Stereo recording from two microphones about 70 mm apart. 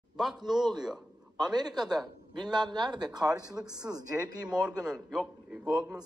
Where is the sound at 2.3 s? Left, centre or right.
Right.